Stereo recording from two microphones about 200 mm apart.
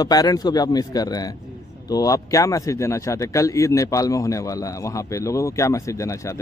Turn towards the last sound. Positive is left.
turn(degrees=15)  # may be behind; listen again after turning